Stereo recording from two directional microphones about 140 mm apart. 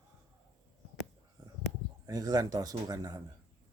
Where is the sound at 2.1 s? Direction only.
25° right (ahead or behind).